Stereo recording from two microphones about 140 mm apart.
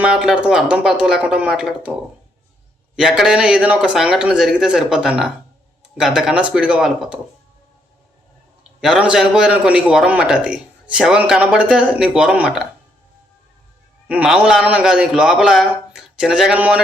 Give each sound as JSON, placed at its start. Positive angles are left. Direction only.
{"t": 0.0, "sound": "a man's voice", "side_deg": -5}
{"t": 2.9, "sound": "a man's voice", "side_deg": -5}
{"t": 8.8, "sound": "a man's voice", "side_deg": -5}
{"t": 14.1, "sound": "a man's voice", "side_deg": -5}